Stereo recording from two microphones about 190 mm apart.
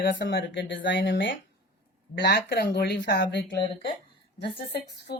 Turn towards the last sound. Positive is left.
turn(degrees=60)  # may be behind; listen again after turning